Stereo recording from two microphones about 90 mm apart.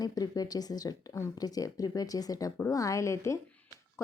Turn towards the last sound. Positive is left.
turn(degrees=35)  # may be behind; listen again after turning